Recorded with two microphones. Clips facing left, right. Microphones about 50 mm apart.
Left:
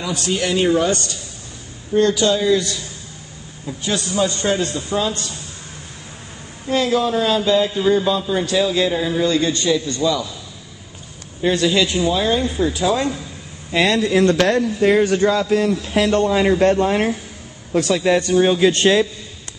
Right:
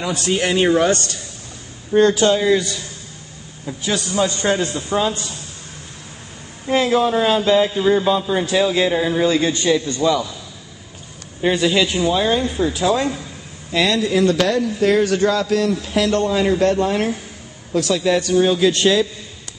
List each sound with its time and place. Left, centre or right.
0.0 s a man's voice: right
2.0 s a man's voice: right
2.3 s speech: right
3.6 s speech: centre
6.7 s a man's voice: right
11.4 s a man's voice: centre
13.7 s speech: left
14.8 s a man's voice: centre
18.7 s speech: left